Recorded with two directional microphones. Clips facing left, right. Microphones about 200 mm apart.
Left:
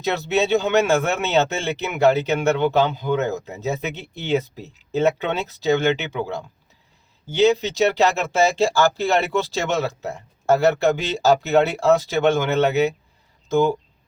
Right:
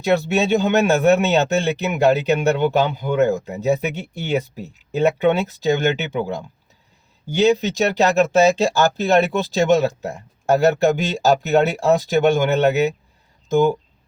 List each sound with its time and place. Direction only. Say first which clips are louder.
0.0 s speech: right 3 dB; 15° right (ahead or behind)